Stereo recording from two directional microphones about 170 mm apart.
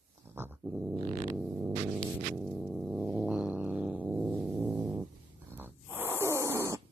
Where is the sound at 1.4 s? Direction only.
5° right (ahead or behind).